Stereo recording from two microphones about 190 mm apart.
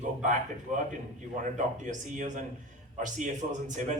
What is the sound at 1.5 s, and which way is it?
A man's voice, 40° right (ahead or behind).